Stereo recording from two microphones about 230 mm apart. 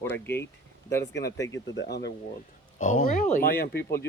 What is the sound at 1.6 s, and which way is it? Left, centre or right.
Speech, left.